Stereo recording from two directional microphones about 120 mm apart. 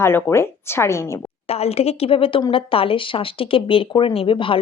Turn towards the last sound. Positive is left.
turn(degrees=45)  # may be behind; listen again after turning